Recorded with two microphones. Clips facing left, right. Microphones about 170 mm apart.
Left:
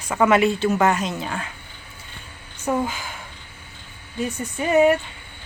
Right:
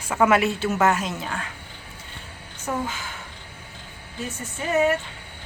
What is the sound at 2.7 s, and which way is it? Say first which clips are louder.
Speech: left 5 dB; 15° left (ahead or behind).